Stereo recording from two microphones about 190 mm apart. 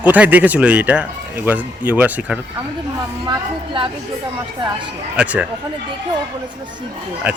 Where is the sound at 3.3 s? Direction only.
25° right (ahead or behind).